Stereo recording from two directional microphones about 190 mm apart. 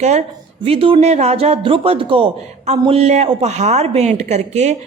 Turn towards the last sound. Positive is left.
turn(degrees=-35)  # may be behind; listen again after turning